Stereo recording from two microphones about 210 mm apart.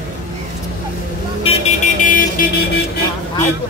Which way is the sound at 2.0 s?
40° left (ahead or behind).